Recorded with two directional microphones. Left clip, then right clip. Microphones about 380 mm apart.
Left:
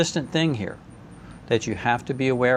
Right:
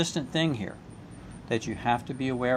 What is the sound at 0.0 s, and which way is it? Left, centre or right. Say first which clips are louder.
Speech: left 5 dB; left.